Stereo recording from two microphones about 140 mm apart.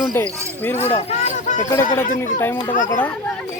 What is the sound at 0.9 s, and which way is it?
Speech, 50° left (ahead or behind).